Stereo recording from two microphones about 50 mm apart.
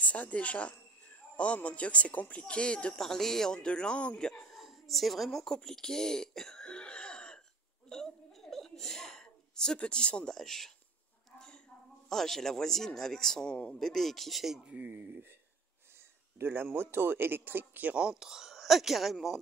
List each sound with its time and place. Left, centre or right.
0.0 s a man's voice: left
3.0 s a man's voice: centre
4.6 s a woman's voice: centre
5.5 s speech: centre
7.9 s a sound: centre
9.8 s a man's voice: centre
10.3 s a man's voice: centre
11.3 s a sound: centre
12.1 s a man's voice: centre
13.7 s speech: centre
14.6 s speech: right
16.3 s speech: right
17.9 s speech: centre